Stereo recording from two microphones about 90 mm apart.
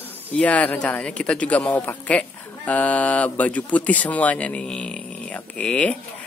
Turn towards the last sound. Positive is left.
turn(degrees=15)  # may be behind; listen again after turning